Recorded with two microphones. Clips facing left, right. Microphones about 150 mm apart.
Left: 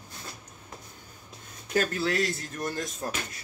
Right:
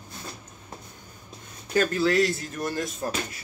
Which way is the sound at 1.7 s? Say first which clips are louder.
Right 4 dB; centre (ahead or behind).